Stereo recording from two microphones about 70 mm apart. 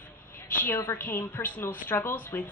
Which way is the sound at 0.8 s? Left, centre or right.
Left.